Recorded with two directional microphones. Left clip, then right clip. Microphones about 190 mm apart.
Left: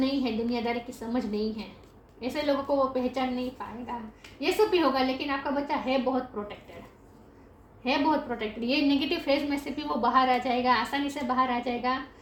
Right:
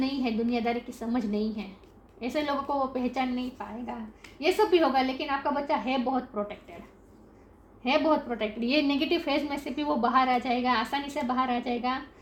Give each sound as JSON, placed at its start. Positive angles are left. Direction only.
{"t": 0.0, "sound": "a woman's voice", "side_deg": -40}
{"t": 7.9, "sound": "a woman's voice", "side_deg": -35}